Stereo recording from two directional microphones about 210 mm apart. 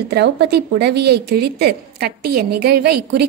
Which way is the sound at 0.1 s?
50° right (ahead or behind).